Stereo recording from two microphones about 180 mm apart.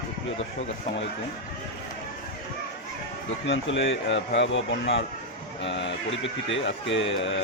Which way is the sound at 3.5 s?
85° left.